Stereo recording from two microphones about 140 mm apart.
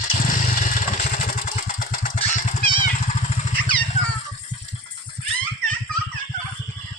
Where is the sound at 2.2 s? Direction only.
60° left (ahead or behind).